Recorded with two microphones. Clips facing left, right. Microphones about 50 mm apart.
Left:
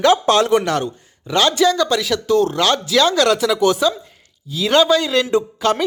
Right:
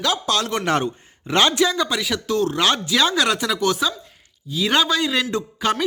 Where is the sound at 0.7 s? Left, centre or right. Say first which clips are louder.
Even; right.